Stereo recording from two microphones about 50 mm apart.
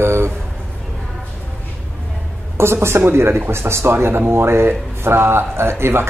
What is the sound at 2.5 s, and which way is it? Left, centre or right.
A woman's voice, right.